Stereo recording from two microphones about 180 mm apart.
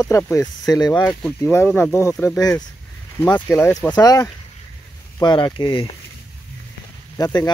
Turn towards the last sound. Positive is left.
turn(degrees=20)  # may be behind; listen again after turning